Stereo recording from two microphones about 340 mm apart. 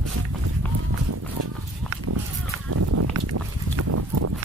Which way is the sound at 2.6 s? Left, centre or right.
Right.